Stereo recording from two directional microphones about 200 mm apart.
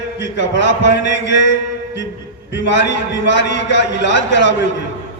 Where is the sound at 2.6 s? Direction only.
60° left (ahead or behind).